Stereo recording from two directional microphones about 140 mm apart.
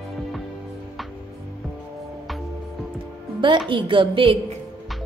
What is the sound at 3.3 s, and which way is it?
A woman's voice, 35° right (ahead or behind).